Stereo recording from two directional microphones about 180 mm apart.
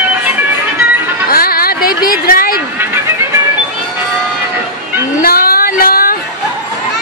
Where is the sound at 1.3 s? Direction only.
55° left (ahead or behind).